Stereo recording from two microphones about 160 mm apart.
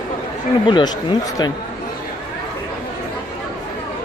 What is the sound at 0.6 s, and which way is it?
Speech, 25° left (ahead or behind).